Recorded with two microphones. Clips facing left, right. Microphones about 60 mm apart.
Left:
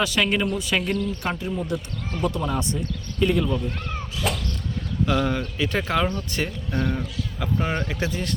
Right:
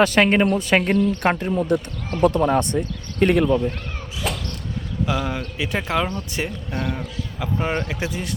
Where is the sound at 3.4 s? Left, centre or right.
Right.